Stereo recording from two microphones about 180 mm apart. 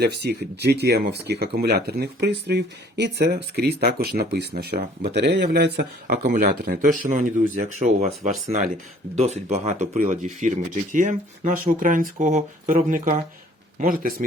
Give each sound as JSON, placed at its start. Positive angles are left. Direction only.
{"t": 0.0, "sound": "speech", "side_deg": -65}
{"t": 6.3, "sound": "speech", "side_deg": -50}